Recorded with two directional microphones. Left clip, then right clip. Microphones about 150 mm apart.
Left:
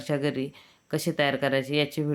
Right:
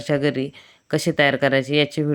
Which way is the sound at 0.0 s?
30° right (ahead or behind).